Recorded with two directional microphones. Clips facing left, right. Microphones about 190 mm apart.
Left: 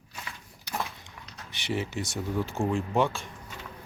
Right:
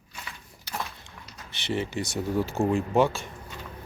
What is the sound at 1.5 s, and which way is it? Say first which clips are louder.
Speech: right 2 dB; 10° left (ahead or behind).